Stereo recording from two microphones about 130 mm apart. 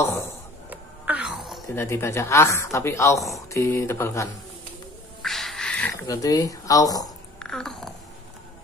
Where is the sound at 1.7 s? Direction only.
20° left (ahead or behind).